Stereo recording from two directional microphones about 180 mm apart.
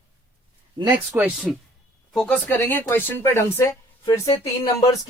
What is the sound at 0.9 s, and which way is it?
Speech, 10° right (ahead or behind).